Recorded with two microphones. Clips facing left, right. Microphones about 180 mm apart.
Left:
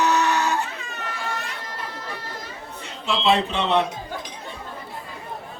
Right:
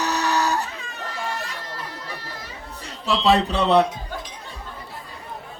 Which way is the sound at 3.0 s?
40° right (ahead or behind).